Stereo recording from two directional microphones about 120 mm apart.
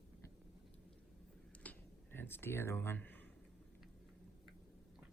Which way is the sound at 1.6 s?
15° left (ahead or behind).